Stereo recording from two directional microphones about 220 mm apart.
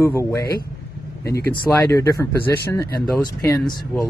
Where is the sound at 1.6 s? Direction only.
10° left (ahead or behind).